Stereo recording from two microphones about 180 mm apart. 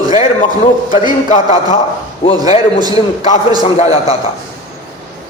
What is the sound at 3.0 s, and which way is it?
A man's voice, 45° left (ahead or behind).